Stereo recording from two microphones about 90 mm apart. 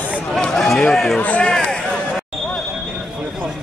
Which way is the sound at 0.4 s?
5° left (ahead or behind).